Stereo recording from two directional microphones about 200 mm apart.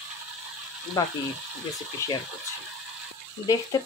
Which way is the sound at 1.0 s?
20° left (ahead or behind).